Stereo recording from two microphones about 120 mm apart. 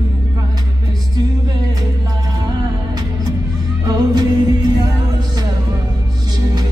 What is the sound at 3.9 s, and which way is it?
Music, 30° right (ahead or behind).